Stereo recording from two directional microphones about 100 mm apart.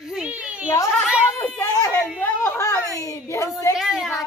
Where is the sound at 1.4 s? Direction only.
30° left (ahead or behind).